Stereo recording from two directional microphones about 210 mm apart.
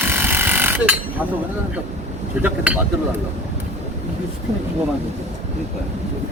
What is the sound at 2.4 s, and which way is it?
Speech, 5° right (ahead or behind).